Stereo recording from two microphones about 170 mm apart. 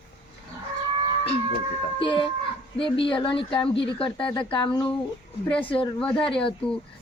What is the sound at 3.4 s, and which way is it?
Speech, 5° left (ahead or behind).